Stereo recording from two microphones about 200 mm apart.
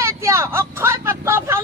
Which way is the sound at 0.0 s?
15° right (ahead or behind).